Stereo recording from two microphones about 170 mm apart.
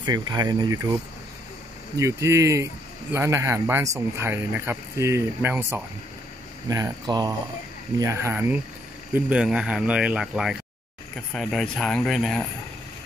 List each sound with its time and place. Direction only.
0.0 s speech: 25° right (ahead or behind)
2.0 s speech: 15° right (ahead or behind); by 12.4 s centre (ahead or behind)